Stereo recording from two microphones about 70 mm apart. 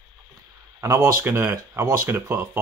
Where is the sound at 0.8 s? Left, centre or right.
Right.